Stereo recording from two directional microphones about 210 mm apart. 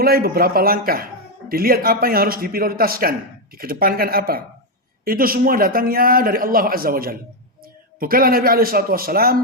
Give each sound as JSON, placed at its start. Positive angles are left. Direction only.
{"t": 0.0, "sound": "speech", "side_deg": -45}